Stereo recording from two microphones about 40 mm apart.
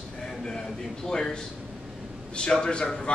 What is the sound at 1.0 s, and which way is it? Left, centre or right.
A man's voice, centre.